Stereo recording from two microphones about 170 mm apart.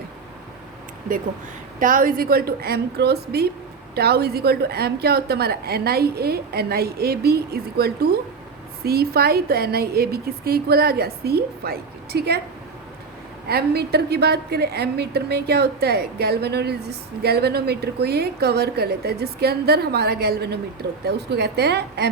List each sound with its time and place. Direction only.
1.8 s a woman's voice: 55° right (ahead or behind); by 12.4 s 70° right (ahead or behind)
13.5 s a woman's voice: 70° right (ahead or behind)